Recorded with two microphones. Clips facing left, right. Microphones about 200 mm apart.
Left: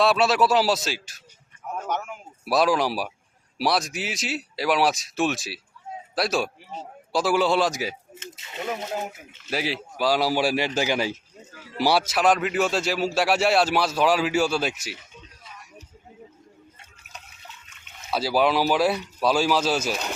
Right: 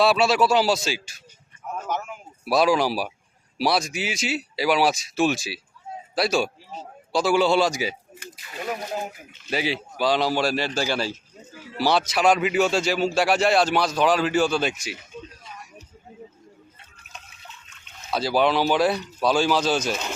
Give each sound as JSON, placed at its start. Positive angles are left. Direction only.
{"t": 0.0, "sound": "a man's voice", "side_deg": 0}
{"t": 1.7, "sound": "a sound", "side_deg": 0}
{"t": 3.6, "sound": "a man's voice", "side_deg": 0}
{"t": 8.1, "sound": "speech", "side_deg": 25}
{"t": 9.5, "sound": "a man's voice", "side_deg": 0}
{"t": 18.1, "sound": "a man's voice", "side_deg": 5}